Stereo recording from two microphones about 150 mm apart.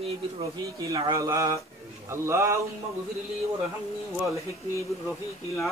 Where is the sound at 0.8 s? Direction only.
20° right (ahead or behind).